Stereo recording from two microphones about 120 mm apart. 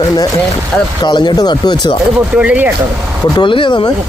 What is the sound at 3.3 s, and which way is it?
Speech, 45° left (ahead or behind).